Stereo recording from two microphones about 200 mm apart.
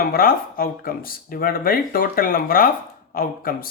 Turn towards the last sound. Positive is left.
turn(degrees=45)  # may be behind; listen again after turning